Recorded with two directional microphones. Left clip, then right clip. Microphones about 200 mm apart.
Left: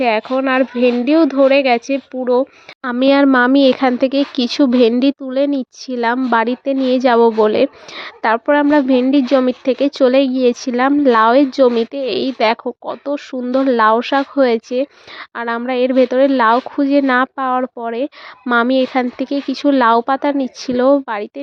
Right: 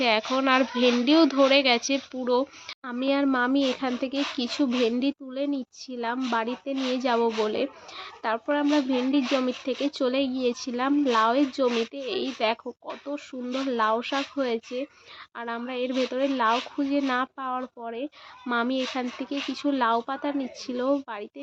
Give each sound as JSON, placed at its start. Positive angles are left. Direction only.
{"t": 0.0, "sound": "a child's voice", "side_deg": 35}
{"t": 2.8, "sound": "speech", "side_deg": 50}